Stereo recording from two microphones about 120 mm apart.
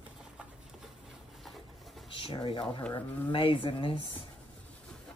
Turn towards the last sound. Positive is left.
turn(degrees=45)  # may be behind; listen again after turning